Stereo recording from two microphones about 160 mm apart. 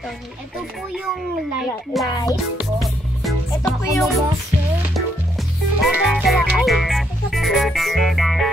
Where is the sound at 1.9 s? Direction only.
Centre (ahead or behind).